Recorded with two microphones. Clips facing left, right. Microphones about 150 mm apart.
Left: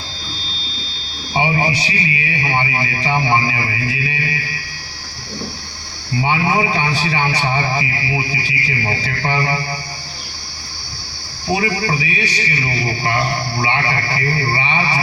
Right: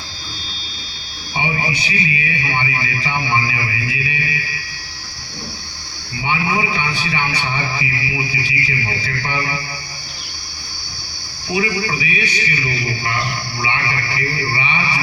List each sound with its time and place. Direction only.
1.4 s a man's voice: 30° left (ahead or behind)
6.1 s a man's voice: 35° left (ahead or behind)
11.4 s a man's voice: 35° left (ahead or behind)